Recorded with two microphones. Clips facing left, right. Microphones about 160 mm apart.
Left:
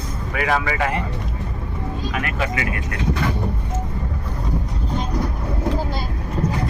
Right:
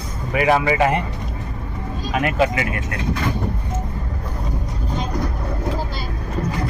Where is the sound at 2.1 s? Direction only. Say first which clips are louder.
Right 8 dB; 20° right (ahead or behind).